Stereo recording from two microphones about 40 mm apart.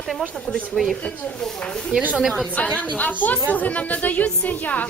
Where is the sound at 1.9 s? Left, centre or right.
Right.